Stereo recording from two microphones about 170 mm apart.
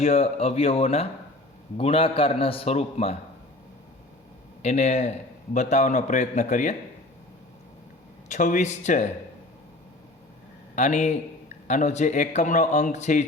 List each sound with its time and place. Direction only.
0.0 s a man's voice: 40° left (ahead or behind)
4.6 s a man's voice: 45° left (ahead or behind)
8.3 s a man's voice: 50° left (ahead or behind)
10.8 s a man's voice: 45° left (ahead or behind)